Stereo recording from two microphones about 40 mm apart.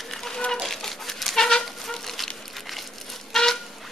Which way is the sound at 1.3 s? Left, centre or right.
Centre.